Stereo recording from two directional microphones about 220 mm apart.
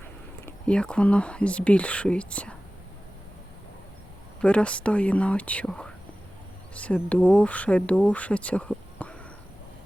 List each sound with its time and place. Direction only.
0.4 s speech: 5° left (ahead or behind)
4.4 s speech: 5° left (ahead or behind)